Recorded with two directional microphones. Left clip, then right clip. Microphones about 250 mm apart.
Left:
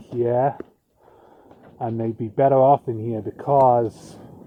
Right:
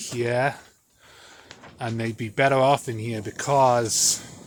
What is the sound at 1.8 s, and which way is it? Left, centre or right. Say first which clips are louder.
Speech: left 4 dB; centre.